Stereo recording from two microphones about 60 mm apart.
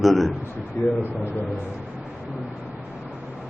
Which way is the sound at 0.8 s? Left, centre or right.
Left.